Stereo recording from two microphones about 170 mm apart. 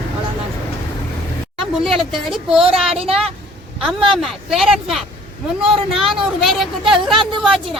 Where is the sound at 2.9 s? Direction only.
35° right (ahead or behind).